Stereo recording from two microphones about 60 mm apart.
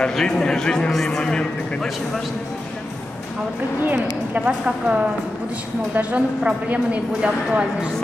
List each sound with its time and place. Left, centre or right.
0.1 s a man's voice: centre
3.8 s a woman's voice: right
4.4 s a woman's voice: centre